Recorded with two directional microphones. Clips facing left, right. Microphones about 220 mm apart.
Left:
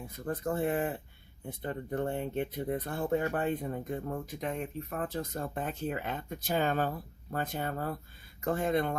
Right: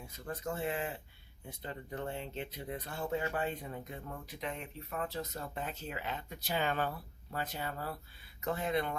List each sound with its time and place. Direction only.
0.3 s speech: 55° left (ahead or behind)